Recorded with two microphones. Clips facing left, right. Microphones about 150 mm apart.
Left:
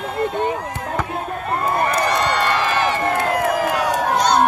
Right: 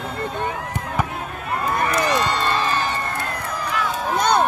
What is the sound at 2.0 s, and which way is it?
Crowd, 60° left (ahead or behind).